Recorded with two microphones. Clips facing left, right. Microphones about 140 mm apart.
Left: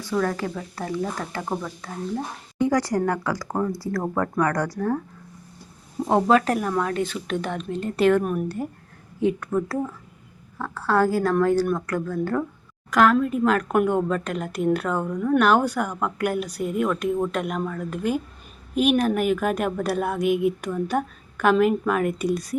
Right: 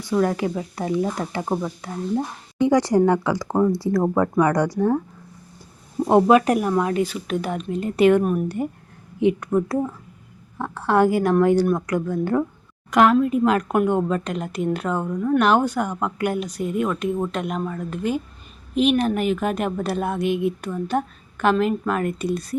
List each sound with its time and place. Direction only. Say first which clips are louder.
0.0 s speech: right 4 dB; 15° right (ahead or behind)
6.1 s speech: right 4 dB; 15° right (ahead or behind)
8.2 s speech: right 4 dB; centre (ahead or behind)
9.2 s speech: right 3 dB; 15° right (ahead or behind)
12.9 s speech: right 2 dB; 5° right (ahead or behind)
14.8 s speech: right 1 dB; 10° right (ahead or behind)
15.4 s a woman's voice: right 1 dB; 5° left (ahead or behind)
15.9 s speech: right 1 dB; 10° right (ahead or behind)
16.2 s speech: right 1 dB; 5° left (ahead or behind)
16.8 s speech: left 2 dB; 5° right (ahead or behind)
17.9 s a woman's voice: even; 5° left (ahead or behind)